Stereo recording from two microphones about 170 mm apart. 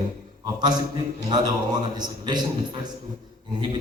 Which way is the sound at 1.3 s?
25° right (ahead or behind).